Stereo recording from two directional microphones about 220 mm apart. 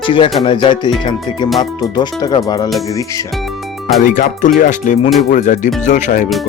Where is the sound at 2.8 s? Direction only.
15° left (ahead or behind).